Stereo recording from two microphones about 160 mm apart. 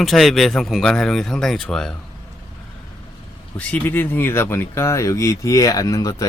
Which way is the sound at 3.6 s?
10° left (ahead or behind).